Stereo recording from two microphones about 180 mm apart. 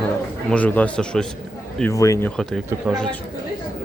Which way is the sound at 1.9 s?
15° left (ahead or behind).